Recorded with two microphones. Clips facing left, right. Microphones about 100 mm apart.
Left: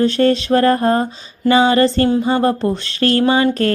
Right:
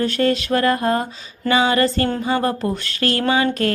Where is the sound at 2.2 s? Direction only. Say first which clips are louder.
Left 4 dB; 30° left (ahead or behind).